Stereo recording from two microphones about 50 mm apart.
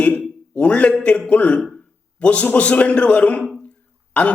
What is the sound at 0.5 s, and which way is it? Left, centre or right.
A man's voice, left.